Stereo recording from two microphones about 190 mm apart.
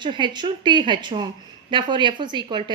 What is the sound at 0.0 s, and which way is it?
A woman's voice, 25° right (ahead or behind).